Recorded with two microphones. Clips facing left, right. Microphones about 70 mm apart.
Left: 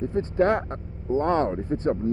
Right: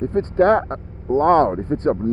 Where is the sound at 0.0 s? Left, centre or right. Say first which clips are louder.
Right 6 dB; right.